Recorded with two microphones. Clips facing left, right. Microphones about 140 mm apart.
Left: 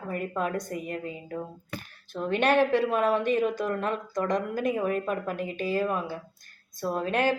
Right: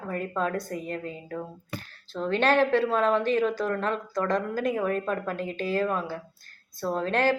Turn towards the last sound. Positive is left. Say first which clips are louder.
# right 1 dB
turn(degrees=15)  # may be behind; listen again after turning